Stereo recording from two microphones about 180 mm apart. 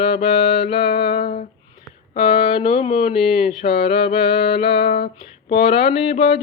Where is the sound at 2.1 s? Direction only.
30° left (ahead or behind).